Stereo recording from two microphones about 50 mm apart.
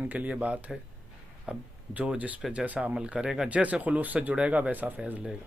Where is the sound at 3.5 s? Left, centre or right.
Right.